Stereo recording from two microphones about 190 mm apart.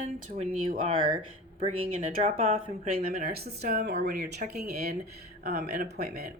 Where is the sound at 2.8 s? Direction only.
50° right (ahead or behind).